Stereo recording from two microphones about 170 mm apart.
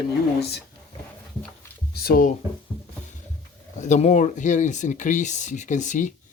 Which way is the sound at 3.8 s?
45° left (ahead or behind).